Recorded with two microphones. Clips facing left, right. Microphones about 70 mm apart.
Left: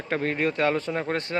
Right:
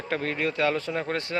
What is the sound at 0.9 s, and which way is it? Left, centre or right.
Speech, left.